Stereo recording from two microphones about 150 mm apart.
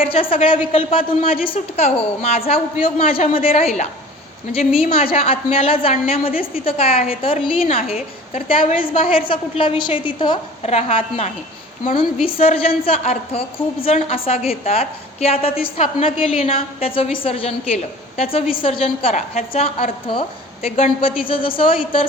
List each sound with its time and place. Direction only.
0.1 s a woman's voice: 40° left (ahead or behind)
10.6 s a woman's voice: 45° left (ahead or behind)
19.1 s a woman's voice: 50° left (ahead or behind)